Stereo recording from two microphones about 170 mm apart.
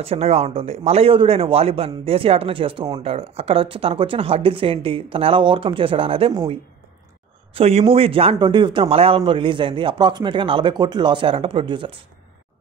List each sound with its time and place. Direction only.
0.0 s speech: 35° right (ahead or behind)
7.5 s a man's voice: 35° right (ahead or behind)